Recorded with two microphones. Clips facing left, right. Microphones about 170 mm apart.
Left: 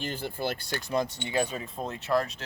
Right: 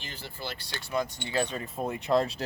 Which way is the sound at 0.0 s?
50° left (ahead or behind).